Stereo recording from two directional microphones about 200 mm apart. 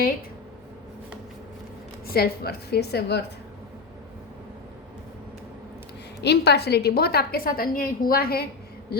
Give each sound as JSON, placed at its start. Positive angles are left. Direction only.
{"t": 2.0, "sound": "a woman's voice", "side_deg": 50}
{"t": 6.2, "sound": "a woman's voice", "side_deg": 55}